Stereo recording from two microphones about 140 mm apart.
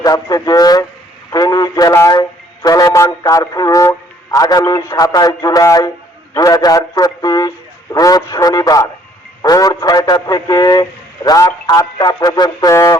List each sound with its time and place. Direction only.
0.0 s a man's voice: 25° left (ahead or behind)